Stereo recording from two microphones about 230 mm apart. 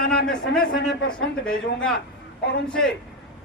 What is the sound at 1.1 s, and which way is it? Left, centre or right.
Speech, centre.